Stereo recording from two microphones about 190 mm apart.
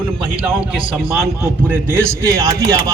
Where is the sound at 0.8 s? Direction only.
30° right (ahead or behind).